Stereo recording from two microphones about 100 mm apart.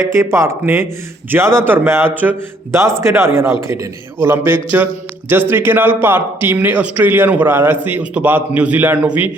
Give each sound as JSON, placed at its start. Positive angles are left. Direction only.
{"t": 0.1, "sound": "a man's voice", "side_deg": -30}